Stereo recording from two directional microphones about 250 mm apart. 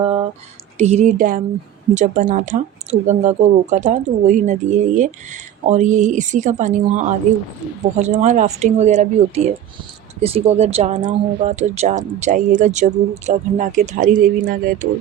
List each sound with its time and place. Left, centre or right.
0.8 s speech: right